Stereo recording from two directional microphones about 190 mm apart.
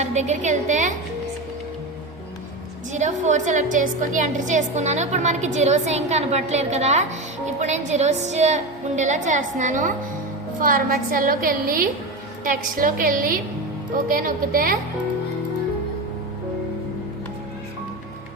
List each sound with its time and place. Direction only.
0.0 s a woman's voice: 35° right (ahead or behind)
2.9 s a woman's voice: 40° right (ahead or behind)